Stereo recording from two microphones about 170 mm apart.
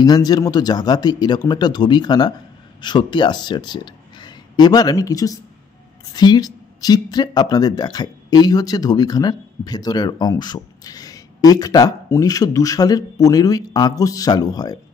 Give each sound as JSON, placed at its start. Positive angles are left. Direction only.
{"t": 0.0, "sound": "speech", "side_deg": 25}